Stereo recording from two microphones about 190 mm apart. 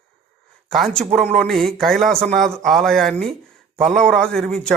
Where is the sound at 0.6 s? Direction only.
Centre (ahead or behind).